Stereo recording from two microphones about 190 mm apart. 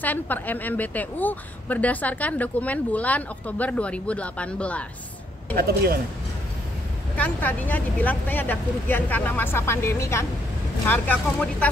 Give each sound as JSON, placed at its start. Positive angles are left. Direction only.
{"t": 0.0, "sound": "a woman's voice", "side_deg": 10}
{"t": 5.6, "sound": "speech", "side_deg": -55}
{"t": 7.2, "sound": "a woman's voice", "side_deg": 10}